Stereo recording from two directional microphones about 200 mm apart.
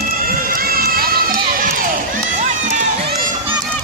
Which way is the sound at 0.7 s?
45° right (ahead or behind).